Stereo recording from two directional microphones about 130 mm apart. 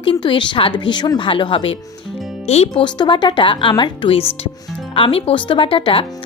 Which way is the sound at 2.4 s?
55° left (ahead or behind).